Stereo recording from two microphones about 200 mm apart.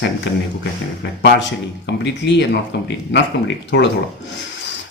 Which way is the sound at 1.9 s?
60° left (ahead or behind).